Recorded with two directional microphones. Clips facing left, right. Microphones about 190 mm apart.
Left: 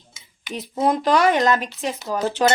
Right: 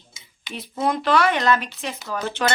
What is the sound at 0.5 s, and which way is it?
A woman's voice, 40° left (ahead or behind).